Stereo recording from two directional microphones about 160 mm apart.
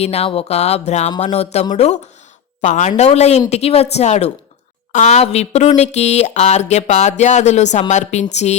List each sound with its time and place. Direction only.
0.0 s speech: 40° left (ahead or behind)